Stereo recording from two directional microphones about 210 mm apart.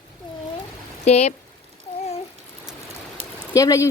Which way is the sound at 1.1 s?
30° left (ahead or behind).